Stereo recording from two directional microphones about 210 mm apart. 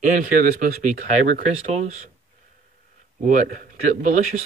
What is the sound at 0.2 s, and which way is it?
Speech, 40° right (ahead or behind).